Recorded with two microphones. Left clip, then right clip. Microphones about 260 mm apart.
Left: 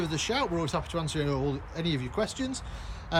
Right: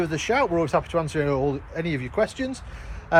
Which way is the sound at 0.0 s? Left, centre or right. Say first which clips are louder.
Right 7 dB; centre.